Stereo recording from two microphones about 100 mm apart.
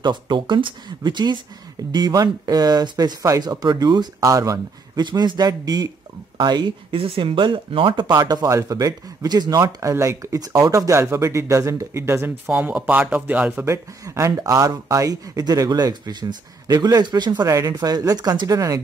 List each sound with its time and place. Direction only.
0.0 s speech: 50° right (ahead or behind); by 5.0 s 35° right (ahead or behind)
5.0 s speech: 50° right (ahead or behind); by 13.7 s 15° right (ahead or behind)
13.7 s speech: 30° right (ahead or behind); by 17.5 s 45° right (ahead or behind)
17.5 s speech: 35° right (ahead or behind)